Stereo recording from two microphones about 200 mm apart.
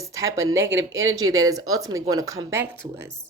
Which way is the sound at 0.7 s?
70° right (ahead or behind).